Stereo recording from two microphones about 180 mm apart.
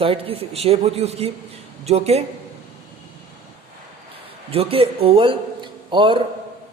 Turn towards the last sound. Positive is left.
turn(degrees=-25)  # may be behind; listen again after turning